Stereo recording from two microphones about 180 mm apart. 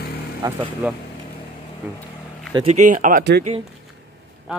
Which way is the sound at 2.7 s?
45° right (ahead or behind).